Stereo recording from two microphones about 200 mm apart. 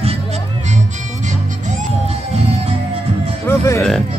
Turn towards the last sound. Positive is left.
turn(degrees=15)  # may be behind; listen again after turning